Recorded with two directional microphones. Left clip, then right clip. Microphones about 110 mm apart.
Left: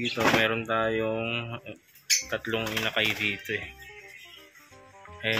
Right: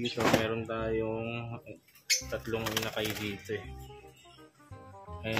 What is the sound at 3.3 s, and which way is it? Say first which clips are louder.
Speech: left 7 dB; 15° right (ahead or behind).